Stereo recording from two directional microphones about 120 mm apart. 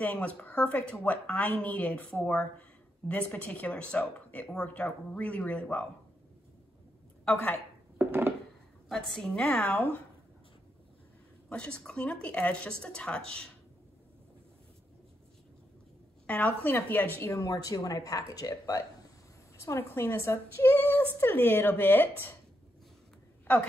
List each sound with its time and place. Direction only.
0.0 s speech: 10° left (ahead or behind)
8.0 s a sound: 15° right (ahead or behind)
8.8 s a woman's voice: 5° left (ahead or behind)
11.4 s speech: 10° left (ahead or behind)
16.3 s speech: 10° left (ahead or behind)
17.3 s a woman's voice: 30° left (ahead or behind)
23.4 s a woman's voice: 15° left (ahead or behind)